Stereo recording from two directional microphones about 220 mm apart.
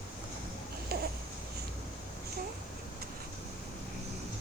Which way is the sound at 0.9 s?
45° right (ahead or behind).